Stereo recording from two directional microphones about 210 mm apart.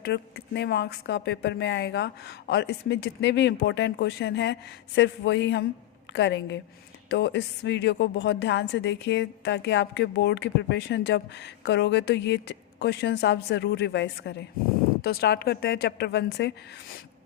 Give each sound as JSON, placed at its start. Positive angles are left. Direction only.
{"t": 0.0, "sound": "speech", "side_deg": 50}